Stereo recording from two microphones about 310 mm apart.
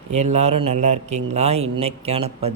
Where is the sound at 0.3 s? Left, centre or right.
Right.